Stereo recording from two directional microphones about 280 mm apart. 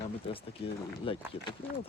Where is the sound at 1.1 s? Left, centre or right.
Centre.